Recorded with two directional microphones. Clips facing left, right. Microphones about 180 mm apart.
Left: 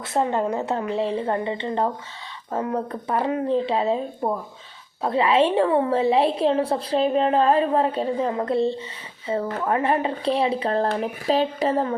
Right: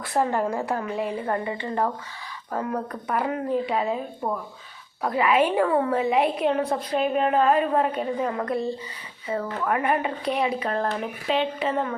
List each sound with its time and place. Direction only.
0.0 s a woman's voice: 20° left (ahead or behind)